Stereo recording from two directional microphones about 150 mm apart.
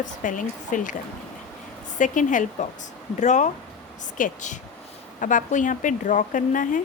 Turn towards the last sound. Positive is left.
turn(degrees=60)  # may be behind; listen again after turning